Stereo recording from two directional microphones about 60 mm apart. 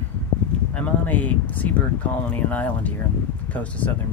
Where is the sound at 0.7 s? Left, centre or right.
Left.